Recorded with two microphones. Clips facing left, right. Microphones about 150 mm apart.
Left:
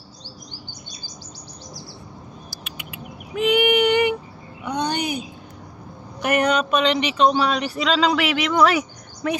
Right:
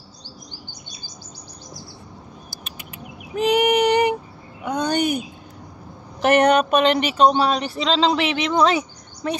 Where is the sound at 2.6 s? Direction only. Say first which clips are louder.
Left 1 dB; 40° right (ahead or behind).